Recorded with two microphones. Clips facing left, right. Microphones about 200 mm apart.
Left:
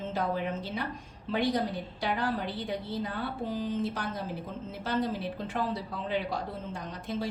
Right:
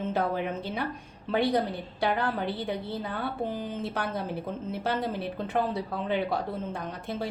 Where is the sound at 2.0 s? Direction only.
60° right (ahead or behind).